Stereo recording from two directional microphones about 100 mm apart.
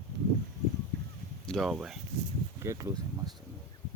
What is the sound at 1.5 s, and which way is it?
Speech, centre (ahead or behind).